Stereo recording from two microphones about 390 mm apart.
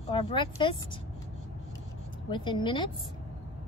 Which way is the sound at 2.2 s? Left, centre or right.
Centre.